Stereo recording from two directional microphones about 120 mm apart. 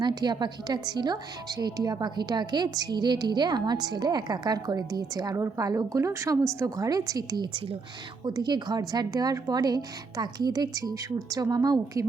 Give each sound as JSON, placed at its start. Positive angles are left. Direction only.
{"t": 0.0, "sound": "a woman's voice", "side_deg": -35}